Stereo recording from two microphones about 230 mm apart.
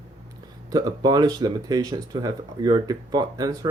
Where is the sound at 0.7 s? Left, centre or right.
Centre.